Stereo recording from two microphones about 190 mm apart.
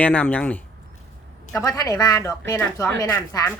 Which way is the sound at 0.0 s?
10° left (ahead or behind).